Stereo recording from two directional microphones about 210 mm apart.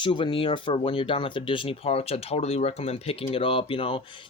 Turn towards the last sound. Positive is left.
turn(degrees=25)  # may be behind; listen again after turning